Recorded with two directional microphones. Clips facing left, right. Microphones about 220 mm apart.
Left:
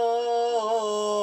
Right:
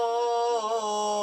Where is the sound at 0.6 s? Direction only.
20° left (ahead or behind).